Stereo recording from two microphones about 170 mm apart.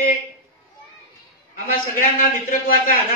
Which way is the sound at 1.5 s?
55° left (ahead or behind).